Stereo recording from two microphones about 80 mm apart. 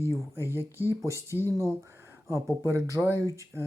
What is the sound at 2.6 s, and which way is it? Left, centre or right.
Speech, right.